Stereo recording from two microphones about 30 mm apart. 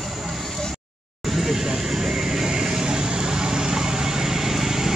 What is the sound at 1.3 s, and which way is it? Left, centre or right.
Vehicle, centre.